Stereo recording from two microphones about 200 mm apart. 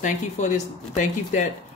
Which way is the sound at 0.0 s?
35° left (ahead or behind).